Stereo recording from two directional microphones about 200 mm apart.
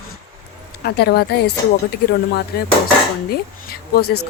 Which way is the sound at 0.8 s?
55° left (ahead or behind).